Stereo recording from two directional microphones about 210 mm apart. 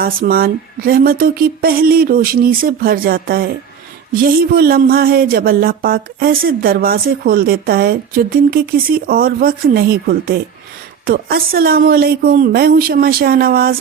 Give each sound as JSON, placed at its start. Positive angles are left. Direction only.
{"t": 0.0, "sound": "speech", "side_deg": -45}